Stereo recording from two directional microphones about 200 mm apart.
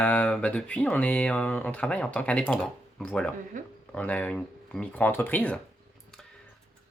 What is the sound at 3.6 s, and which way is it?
Speech, 40° right (ahead or behind).